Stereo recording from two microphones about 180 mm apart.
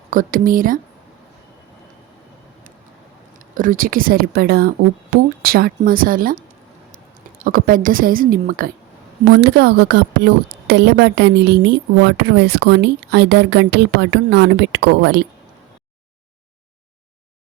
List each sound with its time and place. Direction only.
0.1 s a woman's voice: 50° right (ahead or behind)
3.5 s a woman's voice: 50° right (ahead or behind); by 15.2 s 70° right (ahead or behind)